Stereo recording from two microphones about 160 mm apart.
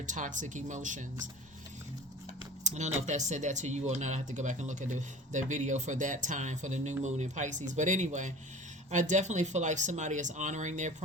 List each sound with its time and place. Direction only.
0.0 s speech: 50° right (ahead or behind)
2.6 s speech: 45° right (ahead or behind)